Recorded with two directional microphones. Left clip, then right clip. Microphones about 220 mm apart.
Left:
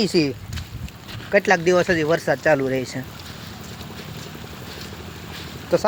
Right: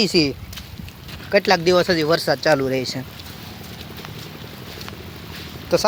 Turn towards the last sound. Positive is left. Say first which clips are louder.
# right 1 dB
turn(degrees=-5)  # may be behind; listen again after turning